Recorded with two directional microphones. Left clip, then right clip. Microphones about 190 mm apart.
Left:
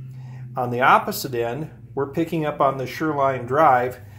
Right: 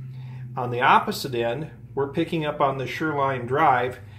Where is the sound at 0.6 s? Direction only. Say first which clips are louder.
Left 2 dB; 30° left (ahead or behind).